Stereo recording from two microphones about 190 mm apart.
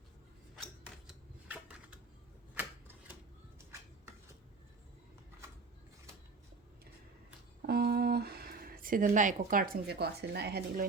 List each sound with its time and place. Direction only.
0.5 s scissors: centre (ahead or behind)
7.7 s speech: 55° right (ahead or behind)